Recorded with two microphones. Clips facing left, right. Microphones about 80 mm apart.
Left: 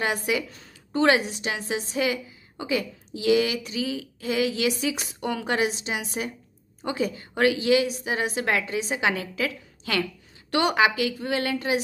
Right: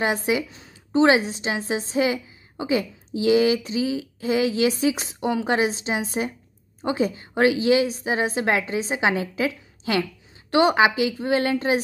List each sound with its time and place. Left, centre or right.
0.0 s a woman's voice: right